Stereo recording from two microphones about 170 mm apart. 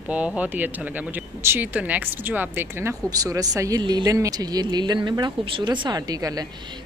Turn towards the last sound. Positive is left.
turn(degrees=-20)  # may be behind; listen again after turning